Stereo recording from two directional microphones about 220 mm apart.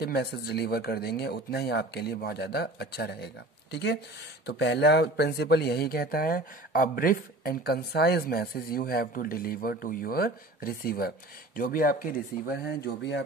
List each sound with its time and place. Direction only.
0.0 s speech: 50° left (ahead or behind)